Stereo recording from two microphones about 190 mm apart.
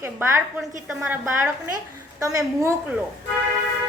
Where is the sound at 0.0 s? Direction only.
15° right (ahead or behind).